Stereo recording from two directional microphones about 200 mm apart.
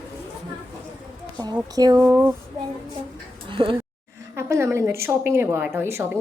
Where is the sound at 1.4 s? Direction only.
20° right (ahead or behind).